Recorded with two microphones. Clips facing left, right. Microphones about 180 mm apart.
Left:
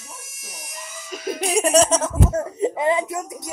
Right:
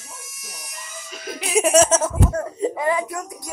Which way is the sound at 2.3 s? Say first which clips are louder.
Left 1 dB; 20° left (ahead or behind).